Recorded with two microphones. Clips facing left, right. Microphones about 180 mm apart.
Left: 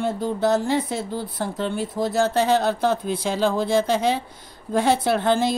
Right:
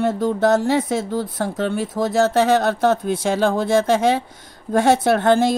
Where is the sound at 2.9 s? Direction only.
45° right (ahead or behind).